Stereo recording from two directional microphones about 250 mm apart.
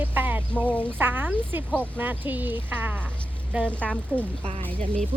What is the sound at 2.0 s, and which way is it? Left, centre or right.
Speech, centre.